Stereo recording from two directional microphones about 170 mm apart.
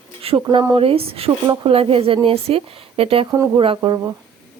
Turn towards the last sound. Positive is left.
turn(degrees=-25)  # may be behind; listen again after turning